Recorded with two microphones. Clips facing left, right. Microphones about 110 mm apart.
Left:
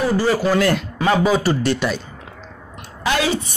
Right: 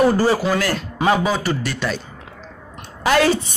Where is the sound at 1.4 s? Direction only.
30° left (ahead or behind).